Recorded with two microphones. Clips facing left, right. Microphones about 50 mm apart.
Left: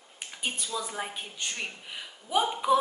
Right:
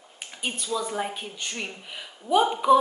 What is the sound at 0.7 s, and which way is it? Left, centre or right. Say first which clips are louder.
A woman's voice: right 6 dB; centre.